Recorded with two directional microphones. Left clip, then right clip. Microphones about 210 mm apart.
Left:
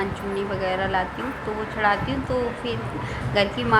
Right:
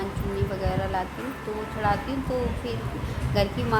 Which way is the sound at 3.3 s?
10° left (ahead or behind).